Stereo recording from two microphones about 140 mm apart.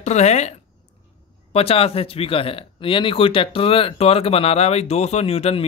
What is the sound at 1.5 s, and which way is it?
Speech, 45° left (ahead or behind).